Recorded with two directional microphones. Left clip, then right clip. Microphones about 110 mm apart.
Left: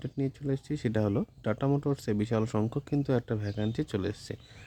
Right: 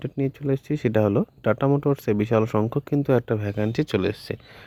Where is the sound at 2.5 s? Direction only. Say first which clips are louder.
Right 8 dB; 30° right (ahead or behind).